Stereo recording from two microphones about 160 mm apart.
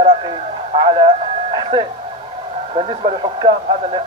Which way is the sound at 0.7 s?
30° right (ahead or behind).